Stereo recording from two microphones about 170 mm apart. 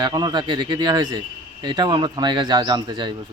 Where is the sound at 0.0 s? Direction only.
25° right (ahead or behind).